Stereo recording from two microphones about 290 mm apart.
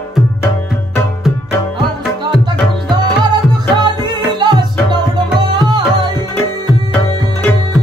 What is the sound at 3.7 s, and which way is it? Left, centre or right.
Music, centre.